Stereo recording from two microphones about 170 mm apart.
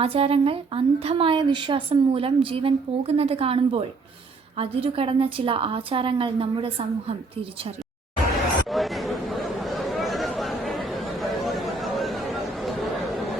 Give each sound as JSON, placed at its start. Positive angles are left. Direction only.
{"t": 0.0, "sound": "a woman's voice", "side_deg": -35}
{"t": 8.7, "sound": "chatter", "side_deg": 0}